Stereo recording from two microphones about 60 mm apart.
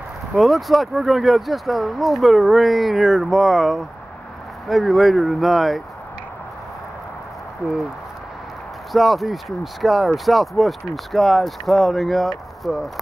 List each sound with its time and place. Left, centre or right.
0.4 s speech: centre
7.6 s speech: right
8.9 s speech: centre